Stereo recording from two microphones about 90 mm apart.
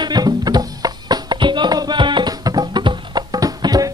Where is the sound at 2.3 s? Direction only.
45° right (ahead or behind).